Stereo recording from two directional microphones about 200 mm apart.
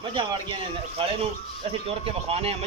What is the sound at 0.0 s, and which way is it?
A man's voice, 25° right (ahead or behind).